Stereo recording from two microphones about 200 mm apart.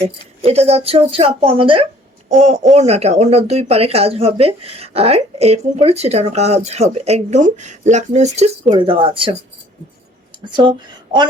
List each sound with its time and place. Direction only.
0.4 s a woman's voice: 30° right (ahead or behind)
10.4 s a woman's voice: 20° right (ahead or behind)